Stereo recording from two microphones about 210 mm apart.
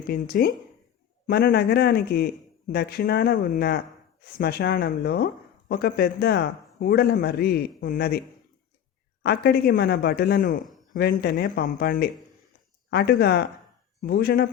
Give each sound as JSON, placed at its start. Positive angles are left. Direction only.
{"t": 0.1, "sound": "speech", "side_deg": 45}
{"t": 9.2, "sound": "speech", "side_deg": 50}